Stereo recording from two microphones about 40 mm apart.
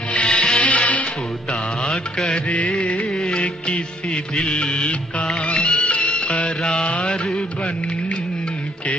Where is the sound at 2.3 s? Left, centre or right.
Left.